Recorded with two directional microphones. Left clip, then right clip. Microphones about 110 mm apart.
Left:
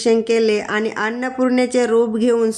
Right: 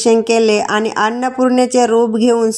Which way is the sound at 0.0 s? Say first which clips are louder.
Right 4 dB; 45° right (ahead or behind).